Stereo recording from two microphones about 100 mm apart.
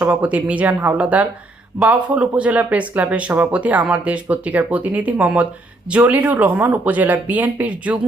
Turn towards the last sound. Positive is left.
turn(degrees=-15)  # may be behind; listen again after turning